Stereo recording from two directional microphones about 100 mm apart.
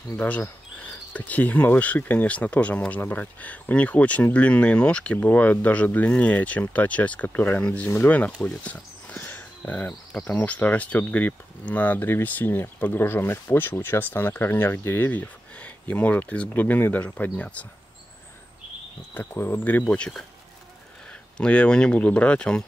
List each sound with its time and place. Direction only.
0.1 s speech: 15° left (ahead or behind)
19.1 s speech: 20° left (ahead or behind)
19.9 s speech: 10° left (ahead or behind)